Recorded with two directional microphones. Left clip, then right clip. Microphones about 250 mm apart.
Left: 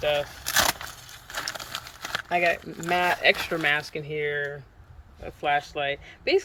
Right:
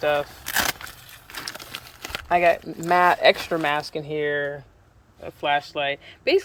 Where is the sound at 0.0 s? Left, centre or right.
Right.